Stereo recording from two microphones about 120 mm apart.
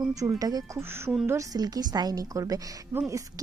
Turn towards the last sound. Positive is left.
turn(degrees=-25)  # may be behind; listen again after turning